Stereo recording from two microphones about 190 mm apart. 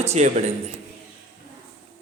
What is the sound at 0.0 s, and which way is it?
Speech, 35° right (ahead or behind).